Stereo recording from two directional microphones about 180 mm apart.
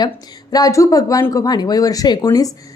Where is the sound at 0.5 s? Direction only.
20° left (ahead or behind).